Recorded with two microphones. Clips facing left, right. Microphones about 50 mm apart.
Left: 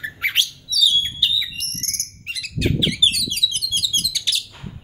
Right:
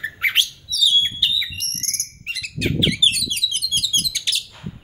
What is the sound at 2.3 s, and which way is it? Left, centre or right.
Bird, right.